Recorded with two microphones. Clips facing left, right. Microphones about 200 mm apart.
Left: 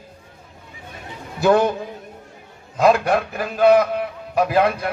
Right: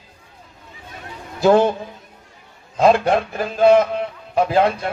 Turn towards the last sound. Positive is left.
turn(degrees=-25)  # may be behind; listen again after turning